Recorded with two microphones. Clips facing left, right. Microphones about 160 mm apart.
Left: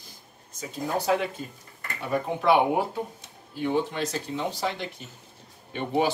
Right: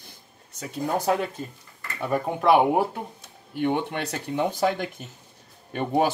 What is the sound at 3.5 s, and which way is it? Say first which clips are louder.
Speech: right 1 dB; 65° right (ahead or behind).